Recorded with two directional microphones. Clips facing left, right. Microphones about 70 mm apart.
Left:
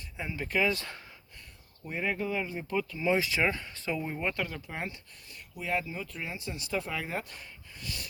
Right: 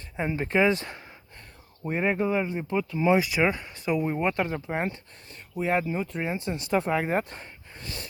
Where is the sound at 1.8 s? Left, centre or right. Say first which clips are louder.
Right 7 dB; right.